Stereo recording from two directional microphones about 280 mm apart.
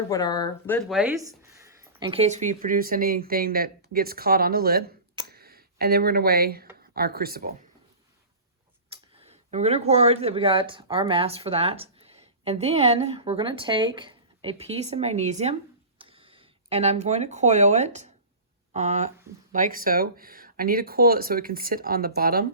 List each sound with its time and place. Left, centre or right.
0.1 s speech: centre
0.8 s speech: centre; by 4.9 s right
5.3 s a sound: right
6.9 s speech: right
9.1 s speech: right